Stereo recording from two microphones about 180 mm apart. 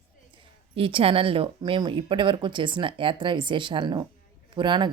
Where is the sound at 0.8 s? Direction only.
30° right (ahead or behind).